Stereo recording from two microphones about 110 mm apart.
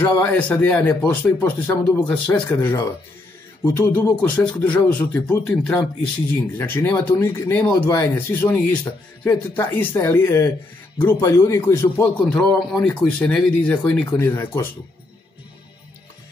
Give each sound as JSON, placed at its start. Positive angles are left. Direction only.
{"t": 0.0, "sound": "speech", "side_deg": 20}
{"t": 2.0, "sound": "speech", "side_deg": 10}
{"t": 6.6, "sound": "speech", "side_deg": 20}
{"t": 12.2, "sound": "speech", "side_deg": 10}
{"t": 14.2, "sound": "speech", "side_deg": 25}